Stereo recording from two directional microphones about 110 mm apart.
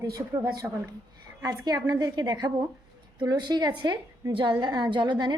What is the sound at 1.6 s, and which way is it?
A woman's voice, 35° right (ahead or behind).